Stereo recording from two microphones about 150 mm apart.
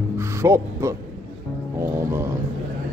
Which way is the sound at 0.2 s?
20° right (ahead or behind).